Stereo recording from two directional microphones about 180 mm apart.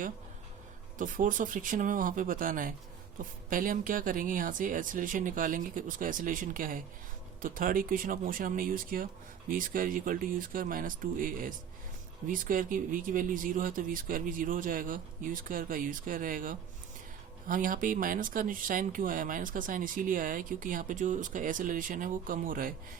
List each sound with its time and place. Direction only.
0.9 s speech: 45° right (ahead or behind)